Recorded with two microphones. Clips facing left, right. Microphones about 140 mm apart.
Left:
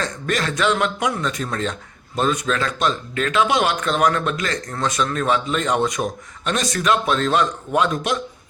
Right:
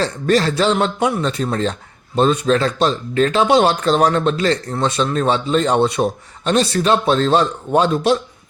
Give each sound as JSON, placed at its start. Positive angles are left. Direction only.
{"t": 0.0, "sound": "speech", "side_deg": -30}